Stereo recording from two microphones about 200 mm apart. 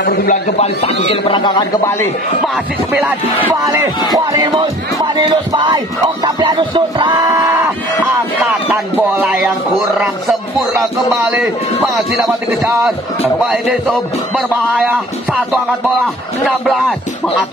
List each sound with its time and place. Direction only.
0.0 s a man's voice: 50° left (ahead or behind)
0.6 s a man's voice: 30° left (ahead or behind)
3.4 s speech: 15° right (ahead or behind)
4.1 s music: 20° right (ahead or behind)
8.9 s speech: 10° right (ahead or behind)
11.9 s speech: centre (ahead or behind)
13.5 s speech: 5° right (ahead or behind)